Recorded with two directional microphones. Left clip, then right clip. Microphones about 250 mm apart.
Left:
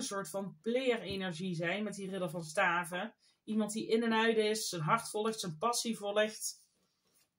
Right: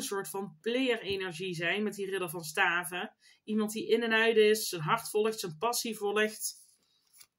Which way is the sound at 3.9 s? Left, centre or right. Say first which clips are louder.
Right 4 dB; right.